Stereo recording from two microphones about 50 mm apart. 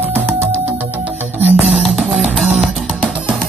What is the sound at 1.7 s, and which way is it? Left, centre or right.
Music, centre.